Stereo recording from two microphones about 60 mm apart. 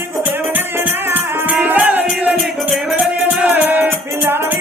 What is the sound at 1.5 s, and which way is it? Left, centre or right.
Music, right.